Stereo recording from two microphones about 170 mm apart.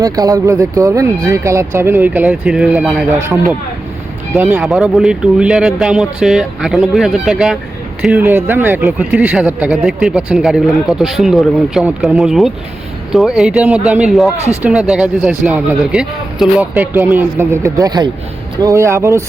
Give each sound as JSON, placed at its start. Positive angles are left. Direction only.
{"t": 0.0, "sound": "speech", "side_deg": -20}
{"t": 4.4, "sound": "speech", "side_deg": -10}
{"t": 4.6, "sound": "speech", "side_deg": 0}